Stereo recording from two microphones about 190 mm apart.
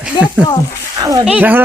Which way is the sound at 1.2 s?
5° right (ahead or behind).